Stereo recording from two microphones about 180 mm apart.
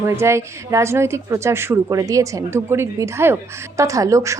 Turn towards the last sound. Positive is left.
turn(degrees=-15)  # may be behind; listen again after turning